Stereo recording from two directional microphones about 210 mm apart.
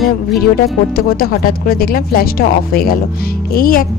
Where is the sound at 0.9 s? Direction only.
45° left (ahead or behind).